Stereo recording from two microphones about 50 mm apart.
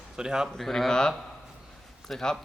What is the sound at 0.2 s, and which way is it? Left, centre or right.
Speech, centre.